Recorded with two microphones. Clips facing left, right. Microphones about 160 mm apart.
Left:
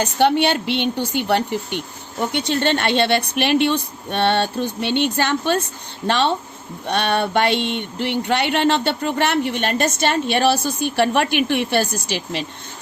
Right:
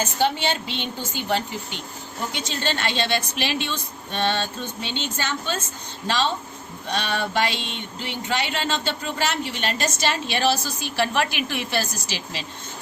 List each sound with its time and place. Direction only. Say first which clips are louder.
0.0 s speech: left 6 dB; 65° left (ahead or behind)